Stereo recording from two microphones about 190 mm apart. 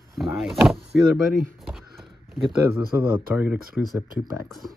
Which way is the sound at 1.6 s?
Centre (ahead or behind).